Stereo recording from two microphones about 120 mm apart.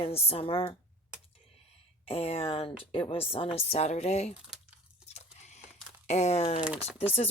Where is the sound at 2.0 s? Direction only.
55° left (ahead or behind).